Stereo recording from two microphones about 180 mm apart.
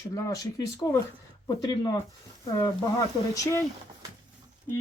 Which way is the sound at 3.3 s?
15° left (ahead or behind).